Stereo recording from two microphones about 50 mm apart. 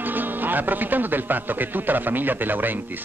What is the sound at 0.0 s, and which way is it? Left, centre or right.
A woman's voice, right.